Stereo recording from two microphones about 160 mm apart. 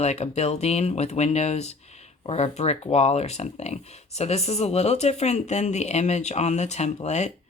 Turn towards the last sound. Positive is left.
turn(degrees=45)  # may be behind; listen again after turning